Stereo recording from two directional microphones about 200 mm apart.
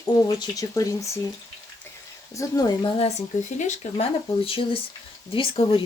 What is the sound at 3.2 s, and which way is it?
Speech, 35° left (ahead or behind).